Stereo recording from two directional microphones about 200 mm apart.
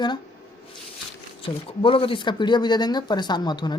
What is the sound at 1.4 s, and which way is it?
Speech, 25° left (ahead or behind).